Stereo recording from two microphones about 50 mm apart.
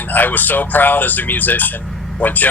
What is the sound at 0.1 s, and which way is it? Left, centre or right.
Speech, left.